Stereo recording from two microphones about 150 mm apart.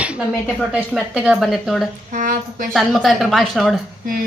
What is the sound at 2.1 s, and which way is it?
Speech, 65° right (ahead or behind).